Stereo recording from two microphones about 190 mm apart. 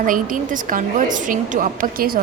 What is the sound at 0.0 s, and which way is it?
A woman's voice, 45° right (ahead or behind).